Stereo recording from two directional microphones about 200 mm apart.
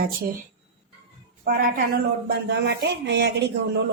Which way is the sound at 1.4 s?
45° right (ahead or behind).